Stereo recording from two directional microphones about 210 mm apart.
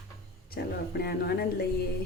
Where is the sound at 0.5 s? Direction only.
50° left (ahead or behind).